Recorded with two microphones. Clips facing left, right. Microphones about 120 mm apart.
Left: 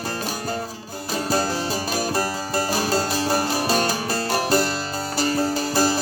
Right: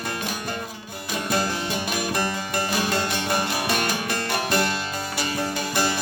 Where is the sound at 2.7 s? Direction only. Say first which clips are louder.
Left 2 dB; 35° left (ahead or behind).